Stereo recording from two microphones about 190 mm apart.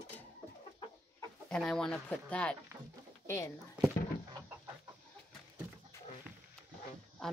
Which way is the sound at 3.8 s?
20° right (ahead or behind).